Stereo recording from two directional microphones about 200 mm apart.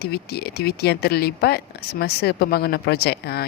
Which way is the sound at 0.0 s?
55° left (ahead or behind).